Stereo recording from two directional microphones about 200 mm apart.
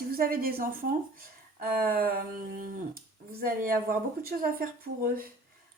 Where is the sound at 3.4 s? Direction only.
45° right (ahead or behind).